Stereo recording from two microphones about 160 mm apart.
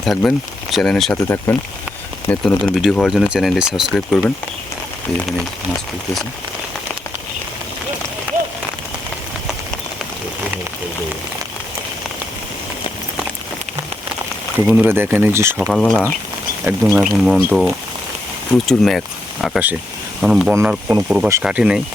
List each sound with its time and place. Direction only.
0.0 s speech: 5° left (ahead or behind)
1.1 s speech: 15° left (ahead or behind)
2.8 s speech: centre (ahead or behind)
14.7 s speech: 10° right (ahead or behind)
15.7 s speech: 5° left (ahead or behind)
20.5 s speech: 15° right (ahead or behind)